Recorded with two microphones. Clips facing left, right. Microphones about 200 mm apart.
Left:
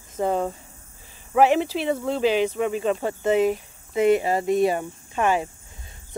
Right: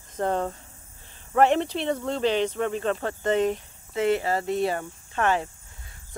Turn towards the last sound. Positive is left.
turn(degrees=15)  # may be behind; listen again after turning